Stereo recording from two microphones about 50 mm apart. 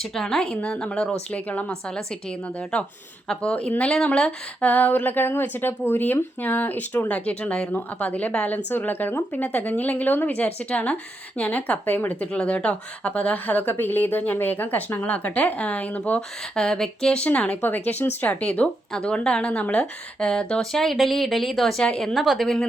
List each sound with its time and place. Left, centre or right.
0.0 s a woman's voice: centre
0.6 s a woman's voice: left
2.7 s a woman's voice: left
4.6 s speech: left
7.1 s a woman's voice: left
9.3 s a woman's voice: left
12.3 s speech: left
16.6 s a woman's voice: centre
17.1 s a woman's voice: left
17.6 s speech: left
18.3 s a woman's voice: left
20.6 s speech: centre